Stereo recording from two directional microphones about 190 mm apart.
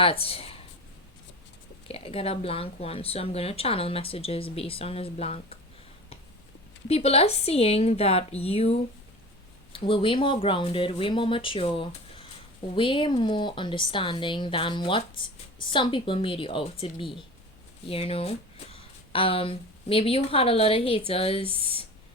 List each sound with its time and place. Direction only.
0.0 s speech: 30° left (ahead or behind)
1.9 s speech: 30° left (ahead or behind)
6.8 s a woman's voice: 30° left (ahead or behind)